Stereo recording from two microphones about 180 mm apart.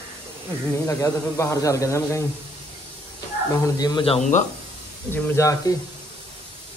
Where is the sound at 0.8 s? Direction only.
15° left (ahead or behind).